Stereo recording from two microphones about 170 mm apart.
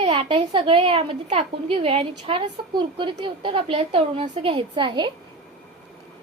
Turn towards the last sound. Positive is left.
turn(degrees=-25)  # may be behind; listen again after turning